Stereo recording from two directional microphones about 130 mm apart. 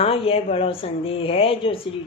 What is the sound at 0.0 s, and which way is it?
Speech, 45° left (ahead or behind).